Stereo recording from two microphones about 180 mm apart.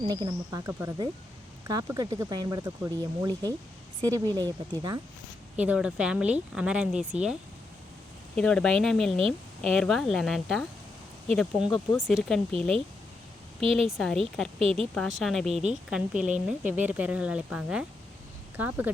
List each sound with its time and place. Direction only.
0.1 s speech: 20° right (ahead or behind)
5.5 s speech: 5° right (ahead or behind)
8.4 s speech: 5° left (ahead or behind)